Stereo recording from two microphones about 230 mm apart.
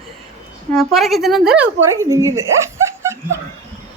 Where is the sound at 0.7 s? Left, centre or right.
Centre.